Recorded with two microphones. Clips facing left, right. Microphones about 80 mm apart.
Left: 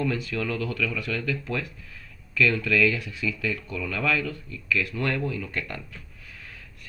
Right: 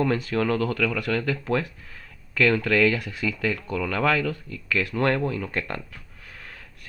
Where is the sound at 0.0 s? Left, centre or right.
Right.